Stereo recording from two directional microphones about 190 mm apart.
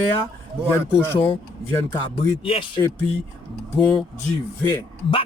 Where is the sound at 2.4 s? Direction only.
30° left (ahead or behind).